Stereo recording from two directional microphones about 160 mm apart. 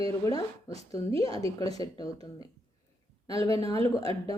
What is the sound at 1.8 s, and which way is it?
Speech, 25° left (ahead or behind).